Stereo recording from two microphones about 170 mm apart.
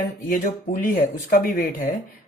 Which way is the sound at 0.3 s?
50° left (ahead or behind).